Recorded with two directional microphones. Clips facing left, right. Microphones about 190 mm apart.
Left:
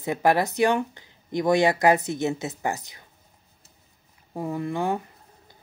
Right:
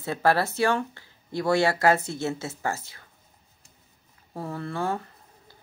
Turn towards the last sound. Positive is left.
turn(degrees=15)  # may be behind; listen again after turning